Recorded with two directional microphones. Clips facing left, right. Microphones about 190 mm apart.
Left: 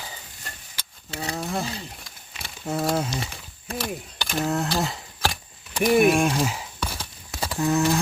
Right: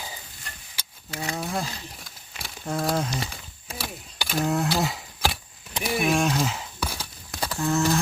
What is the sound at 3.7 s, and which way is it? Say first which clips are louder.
Speech: left 6 dB; 10° right (ahead or behind).